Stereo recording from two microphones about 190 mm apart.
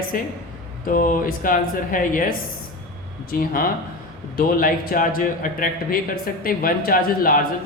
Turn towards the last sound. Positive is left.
turn(degrees=50)  # may be behind; listen again after turning